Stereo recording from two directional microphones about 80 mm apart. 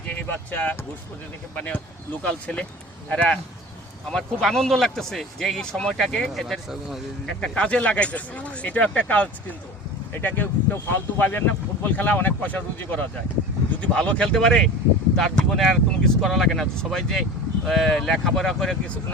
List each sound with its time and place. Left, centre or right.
0.1 s speech: left; by 7.0 s centre
7.3 s speech: centre